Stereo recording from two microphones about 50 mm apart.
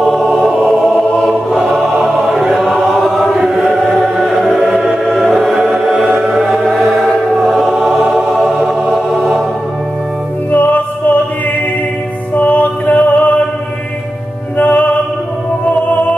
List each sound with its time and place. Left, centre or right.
0.0 s choir: centre
3.3 s music: centre
4.6 s music: centre
4.9 s choir: centre
5.6 s music: centre
7.4 s choir: centre
8.1 s music: centre
10.5 s music: left
12.4 s music: left
14.6 s music: left